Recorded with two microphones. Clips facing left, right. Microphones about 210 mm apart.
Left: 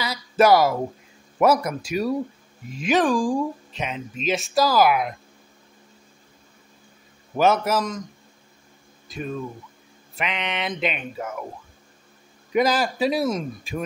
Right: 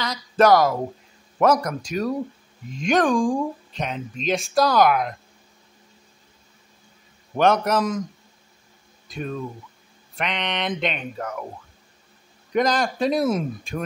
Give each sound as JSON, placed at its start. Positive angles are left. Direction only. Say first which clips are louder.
{"t": 0.0, "sound": "speech", "louder": "even", "side_deg": 10}
{"t": 7.3, "sound": "speech", "louder": "right 1 dB", "side_deg": 5}
{"t": 9.0, "sound": "speech", "louder": "even", "side_deg": 0}
{"t": 12.5, "sound": "speech", "louder": "even", "side_deg": 5}